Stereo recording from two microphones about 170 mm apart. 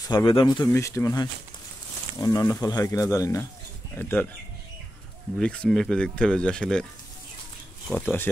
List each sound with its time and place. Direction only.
0.1 s speech: 25° left (ahead or behind); by 4.3 s 10° left (ahead or behind)
5.4 s speech: 5° left (ahead or behind)
7.9 s speech: 10° left (ahead or behind)